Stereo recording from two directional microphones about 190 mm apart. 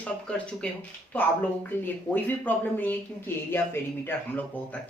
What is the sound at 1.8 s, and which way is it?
Speech, 10° left (ahead or behind).